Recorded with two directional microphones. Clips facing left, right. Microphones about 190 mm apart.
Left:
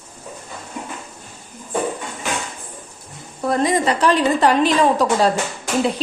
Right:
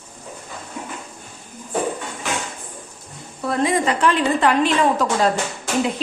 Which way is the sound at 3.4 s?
40° left (ahead or behind).